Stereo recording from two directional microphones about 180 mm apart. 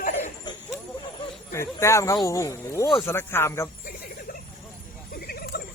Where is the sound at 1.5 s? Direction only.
15° left (ahead or behind).